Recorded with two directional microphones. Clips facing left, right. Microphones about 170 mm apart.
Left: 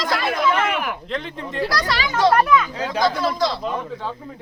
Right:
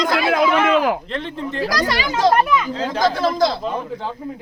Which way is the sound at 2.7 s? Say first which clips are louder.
Right 2 dB; 10° left (ahead or behind).